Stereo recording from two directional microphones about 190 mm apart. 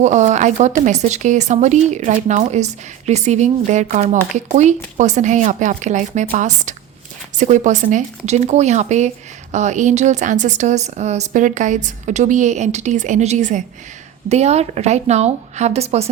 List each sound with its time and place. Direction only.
0.0 s speech: 40° right (ahead or behind)